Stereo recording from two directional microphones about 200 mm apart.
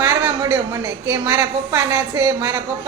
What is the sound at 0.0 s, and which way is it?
A woman's voice, 15° right (ahead or behind).